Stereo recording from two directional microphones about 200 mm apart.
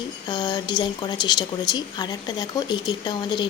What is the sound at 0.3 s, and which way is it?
A woman's voice, 20° left (ahead or behind).